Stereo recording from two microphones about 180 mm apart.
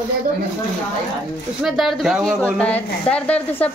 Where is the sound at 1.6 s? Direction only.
Centre (ahead or behind).